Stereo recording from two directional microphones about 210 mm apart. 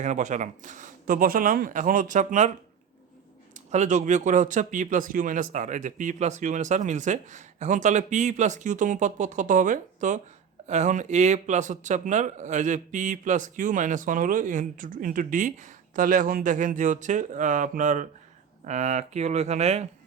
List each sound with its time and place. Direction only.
0.0 s speech: 35° right (ahead or behind)
3.5 s speech: 35° right (ahead or behind)